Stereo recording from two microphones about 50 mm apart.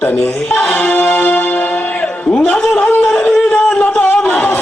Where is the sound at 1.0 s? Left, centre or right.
Left.